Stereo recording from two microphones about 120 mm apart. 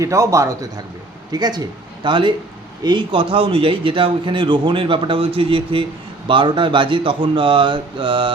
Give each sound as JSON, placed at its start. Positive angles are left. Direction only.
{"t": 0.0, "sound": "a man's voice", "side_deg": -25}